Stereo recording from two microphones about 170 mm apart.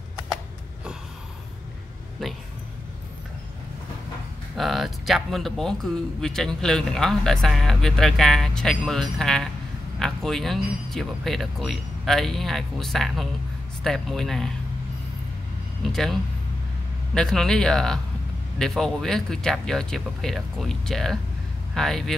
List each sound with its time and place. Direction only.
4.6 s speech: centre (ahead or behind)
15.8 s speech: centre (ahead or behind)